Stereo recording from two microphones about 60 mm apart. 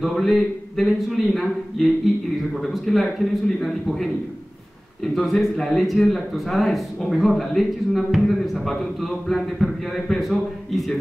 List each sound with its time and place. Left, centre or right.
0.0 s speech: centre